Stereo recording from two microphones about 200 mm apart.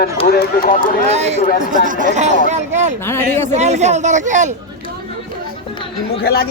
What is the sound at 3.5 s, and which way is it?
Speech, 35° right (ahead or behind).